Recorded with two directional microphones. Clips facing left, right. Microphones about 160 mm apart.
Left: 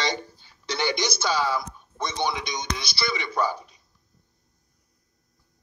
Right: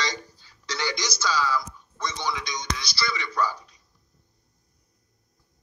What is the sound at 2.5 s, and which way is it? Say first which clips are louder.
Speech: left 1 dB; 55° left (ahead or behind).